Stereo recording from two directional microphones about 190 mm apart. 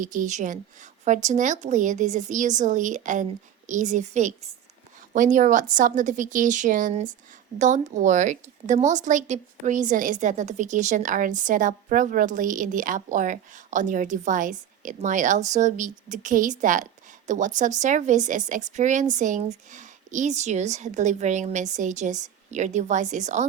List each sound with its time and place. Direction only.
0.0 s a woman's voice: 45° right (ahead or behind)